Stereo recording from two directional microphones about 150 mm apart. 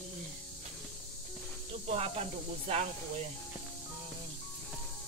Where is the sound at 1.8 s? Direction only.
45° right (ahead or behind).